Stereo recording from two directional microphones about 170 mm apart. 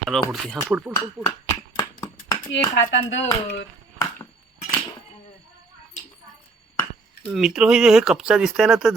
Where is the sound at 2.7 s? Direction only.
90° left.